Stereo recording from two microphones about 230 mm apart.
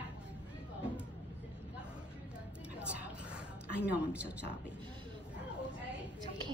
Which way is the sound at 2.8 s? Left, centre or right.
Centre.